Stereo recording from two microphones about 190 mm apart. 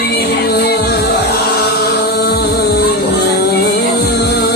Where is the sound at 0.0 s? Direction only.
55° left (ahead or behind).